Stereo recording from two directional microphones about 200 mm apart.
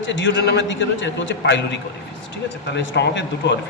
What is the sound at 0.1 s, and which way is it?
A man's voice, 65° left (ahead or behind).